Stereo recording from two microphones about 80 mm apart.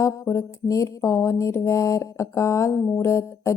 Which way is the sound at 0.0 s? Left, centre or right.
Left.